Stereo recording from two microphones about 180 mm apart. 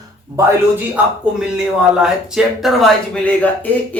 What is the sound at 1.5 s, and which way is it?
Speech, 5° right (ahead or behind).